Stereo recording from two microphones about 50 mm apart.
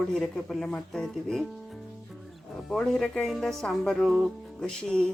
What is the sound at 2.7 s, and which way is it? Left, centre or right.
Speech, centre.